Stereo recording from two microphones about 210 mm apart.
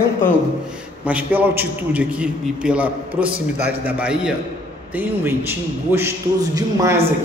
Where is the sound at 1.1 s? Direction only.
10° right (ahead or behind).